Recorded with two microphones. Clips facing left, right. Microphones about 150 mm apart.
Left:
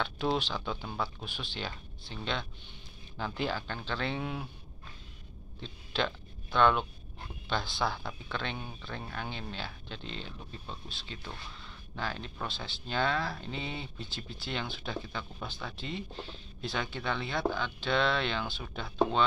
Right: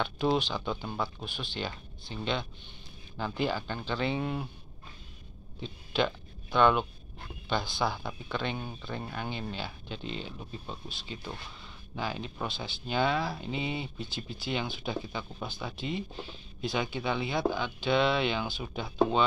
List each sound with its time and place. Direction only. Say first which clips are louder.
0.0 s speech: right 3 dB; 5° right (ahead or behind)
5.6 s speech: right 4 dB; 5° right (ahead or behind)